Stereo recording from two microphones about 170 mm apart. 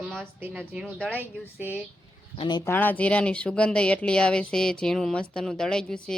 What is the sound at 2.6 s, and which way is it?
Speech, 10° left (ahead or behind).